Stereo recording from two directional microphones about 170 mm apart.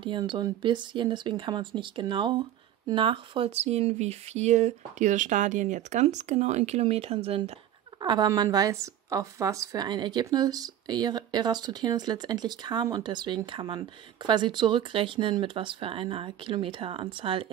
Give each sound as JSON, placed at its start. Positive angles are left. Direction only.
{"t": 0.0, "sound": "speech", "side_deg": -30}
{"t": 8.0, "sound": "speech", "side_deg": -25}